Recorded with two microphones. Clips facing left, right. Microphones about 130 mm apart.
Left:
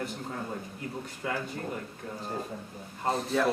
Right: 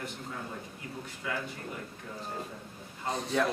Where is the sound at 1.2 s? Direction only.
40° left (ahead or behind).